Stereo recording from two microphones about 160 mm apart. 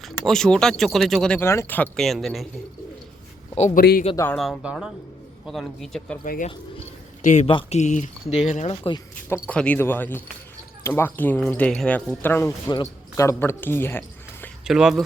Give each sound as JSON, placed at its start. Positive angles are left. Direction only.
{"t": 0.0, "sound": "a man's voice", "side_deg": 0}
{"t": 3.8, "sound": "speech", "side_deg": 65}
{"t": 4.4, "sound": "a man's voice", "side_deg": 0}
{"t": 6.2, "sound": "speech", "side_deg": 60}
{"t": 7.4, "sound": "speech", "side_deg": 40}
{"t": 9.3, "sound": "speech", "side_deg": 10}
{"t": 14.6, "sound": "speech", "side_deg": -5}